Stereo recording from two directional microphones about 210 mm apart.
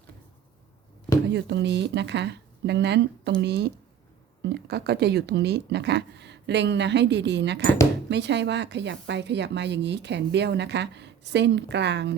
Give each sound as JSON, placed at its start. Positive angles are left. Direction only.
{"t": 1.3, "sound": "a woman's voice", "side_deg": -55}